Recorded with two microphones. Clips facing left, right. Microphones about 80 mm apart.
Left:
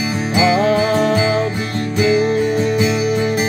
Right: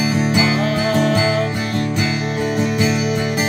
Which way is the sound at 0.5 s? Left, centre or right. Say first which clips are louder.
Left 3 dB; left.